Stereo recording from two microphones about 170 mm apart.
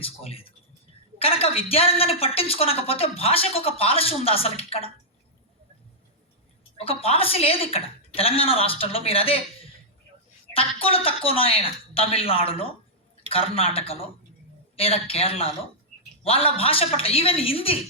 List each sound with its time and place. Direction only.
0.0 s a woman's voice: 35° left (ahead or behind)
6.7 s a woman's voice: 35° left (ahead or behind)